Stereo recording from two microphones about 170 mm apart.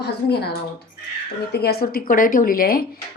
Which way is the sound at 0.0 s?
75° left (ahead or behind).